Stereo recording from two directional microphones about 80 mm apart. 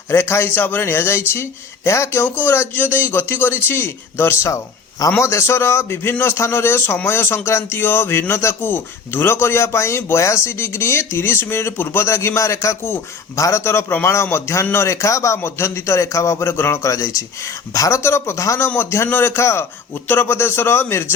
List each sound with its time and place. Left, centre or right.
0.1 s speech: left